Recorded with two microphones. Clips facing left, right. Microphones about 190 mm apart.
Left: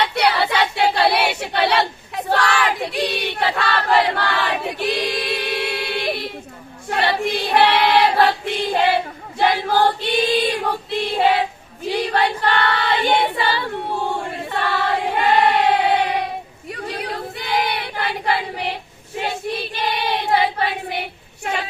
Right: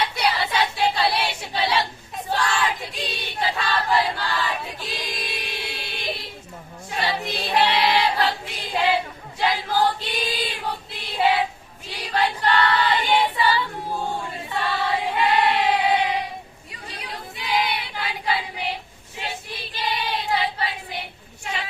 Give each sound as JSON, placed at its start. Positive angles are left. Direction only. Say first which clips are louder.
{"t": 0.0, "sound": "choir", "louder": "left 5 dB", "side_deg": 65}
{"t": 11.9, "sound": "female singing", "louder": "left 5 dB", "side_deg": 65}
{"t": 14.3, "sound": "choir", "louder": "left 4 dB", "side_deg": 65}
{"t": 19.8, "sound": "child singing", "louder": "left 3 dB", "side_deg": 65}
{"t": 21.5, "sound": "a sound", "louder": "left 6 dB", "side_deg": 60}